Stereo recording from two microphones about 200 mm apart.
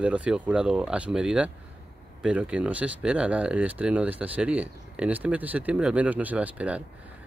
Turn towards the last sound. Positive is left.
turn(degrees=-5)  # may be behind; listen again after turning